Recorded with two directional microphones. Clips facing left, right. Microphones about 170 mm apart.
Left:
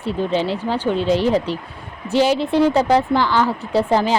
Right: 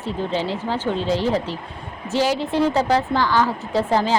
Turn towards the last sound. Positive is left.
turn(degrees=15)  # may be behind; listen again after turning